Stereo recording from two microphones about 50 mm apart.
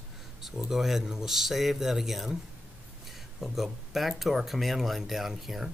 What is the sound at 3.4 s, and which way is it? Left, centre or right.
Speech, centre.